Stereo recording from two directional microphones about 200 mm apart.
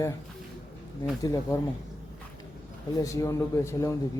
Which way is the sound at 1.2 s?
15° left (ahead or behind).